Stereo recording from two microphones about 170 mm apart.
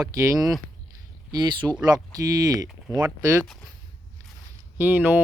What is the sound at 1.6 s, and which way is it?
Speech, 10° right (ahead or behind).